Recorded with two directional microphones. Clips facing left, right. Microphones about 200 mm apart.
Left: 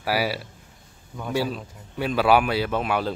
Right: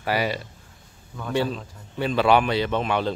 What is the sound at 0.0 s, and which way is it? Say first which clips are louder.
Speech: even; 5° left (ahead or behind).